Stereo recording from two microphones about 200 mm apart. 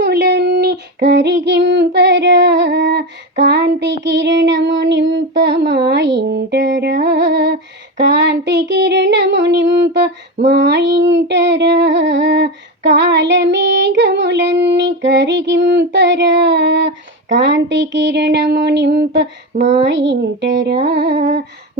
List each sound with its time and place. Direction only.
0.0 s child singing: 55° right (ahead or behind)
5.9 s humming: 60° right (ahead or behind)
17.3 s speech: 65° right (ahead or behind)
19.5 s speech: 35° right (ahead or behind)
19.9 s speech: 65° right (ahead or behind)